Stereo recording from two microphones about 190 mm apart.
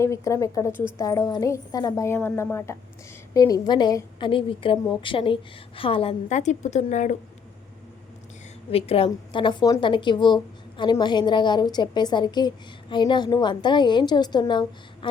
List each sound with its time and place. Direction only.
0.0 s a woman's voice: 15° left (ahead or behind); by 7.2 s 40° left (ahead or behind)
8.7 s a woman's voice: 30° left (ahead or behind)